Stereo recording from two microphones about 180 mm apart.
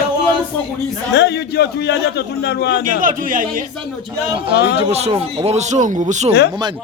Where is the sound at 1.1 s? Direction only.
70° left (ahead or behind).